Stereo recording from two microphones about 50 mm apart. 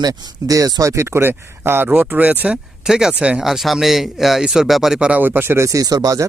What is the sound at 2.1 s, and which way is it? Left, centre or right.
Speech, right.